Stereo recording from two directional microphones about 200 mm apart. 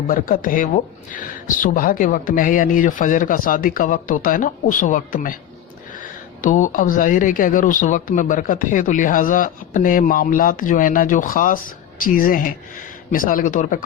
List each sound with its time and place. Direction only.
0.1 s speech: 45° left (ahead or behind)